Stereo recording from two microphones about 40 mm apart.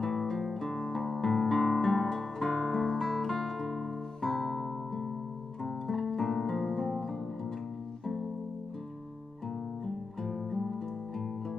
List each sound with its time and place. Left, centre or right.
0.0 s guitar: centre
4.2 s music: centre
9.8 s music: centre